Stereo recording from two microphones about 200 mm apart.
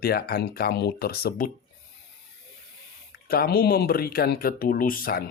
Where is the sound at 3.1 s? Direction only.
50° left (ahead or behind).